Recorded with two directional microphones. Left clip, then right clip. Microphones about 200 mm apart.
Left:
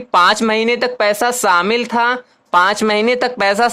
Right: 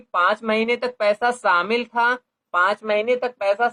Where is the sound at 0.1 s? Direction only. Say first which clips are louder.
Left 7 dB; 40° left (ahead or behind).